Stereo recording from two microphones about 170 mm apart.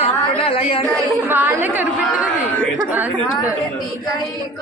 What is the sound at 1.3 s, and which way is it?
A woman's voice, 10° right (ahead or behind).